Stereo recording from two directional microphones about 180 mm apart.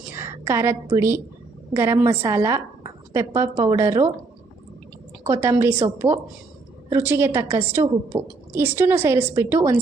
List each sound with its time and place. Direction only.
0.1 s a woman's voice: 15° right (ahead or behind)
5.3 s a woman's voice: 15° right (ahead or behind)